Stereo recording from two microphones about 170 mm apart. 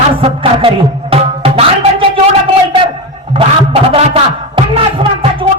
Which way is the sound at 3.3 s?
35° right (ahead or behind).